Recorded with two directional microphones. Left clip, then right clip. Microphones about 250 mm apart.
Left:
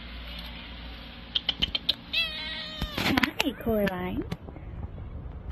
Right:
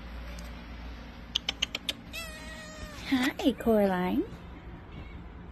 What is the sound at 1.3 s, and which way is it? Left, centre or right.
Typing, right.